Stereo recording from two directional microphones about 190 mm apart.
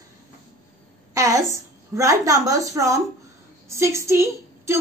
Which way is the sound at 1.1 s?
15° right (ahead or behind).